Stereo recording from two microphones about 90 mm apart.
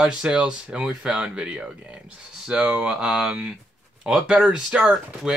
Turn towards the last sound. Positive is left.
turn(degrees=-10)  # may be behind; listen again after turning